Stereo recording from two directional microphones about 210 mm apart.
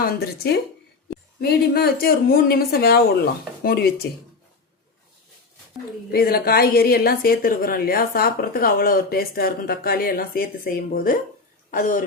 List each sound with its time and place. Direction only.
0.0 s a woman's voice: 50° left (ahead or behind)
6.1 s a woman's voice: 45° left (ahead or behind)